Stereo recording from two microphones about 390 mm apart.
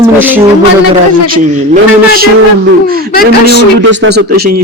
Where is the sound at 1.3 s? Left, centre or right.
Centre.